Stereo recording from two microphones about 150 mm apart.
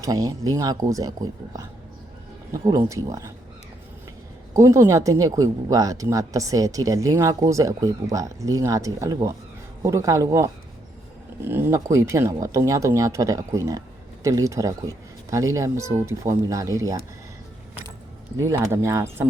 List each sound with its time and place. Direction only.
0.0 s speech: 25° right (ahead or behind)
2.5 s speech: 25° right (ahead or behind)
4.5 s speech: 20° right (ahead or behind)
18.3 s speech: 20° right (ahead or behind)